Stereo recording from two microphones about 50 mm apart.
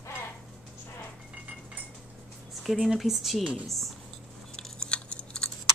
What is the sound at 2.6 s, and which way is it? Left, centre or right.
Speech, centre.